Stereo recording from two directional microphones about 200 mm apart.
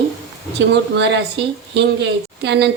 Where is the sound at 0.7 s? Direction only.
65° right (ahead or behind).